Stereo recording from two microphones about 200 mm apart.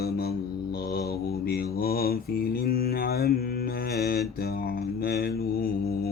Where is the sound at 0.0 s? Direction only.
50° left (ahead or behind).